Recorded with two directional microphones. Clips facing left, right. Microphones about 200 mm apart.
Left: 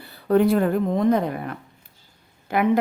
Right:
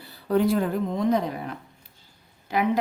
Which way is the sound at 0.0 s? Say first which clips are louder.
Left 4 dB; 60° left (ahead or behind).